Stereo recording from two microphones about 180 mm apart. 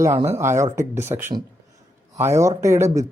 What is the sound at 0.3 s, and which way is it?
Speech, 15° right (ahead or behind).